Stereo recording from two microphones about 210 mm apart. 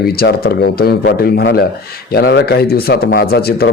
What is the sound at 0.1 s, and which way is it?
Speech, 45° left (ahead or behind).